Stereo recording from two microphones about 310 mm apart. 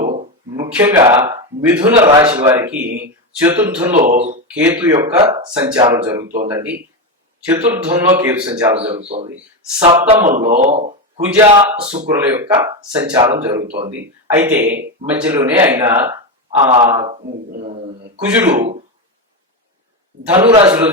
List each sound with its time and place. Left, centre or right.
0.7 s a man's voice: centre
2.8 s a man's voice: right
3.4 s a man's voice: centre
3.9 s a man's voice: right
4.6 s a man's voice: centre
8.7 s a man's voice: centre
11.2 s a man's voice: centre
13.6 s a man's voice: centre
14.3 s a man's voice: centre
16.6 s a man's voice: centre
18.3 s a man's voice: centre
20.3 s a man's voice: centre